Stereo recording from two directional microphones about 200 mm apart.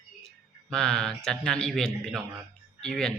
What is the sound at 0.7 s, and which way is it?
Speech, 5° left (ahead or behind).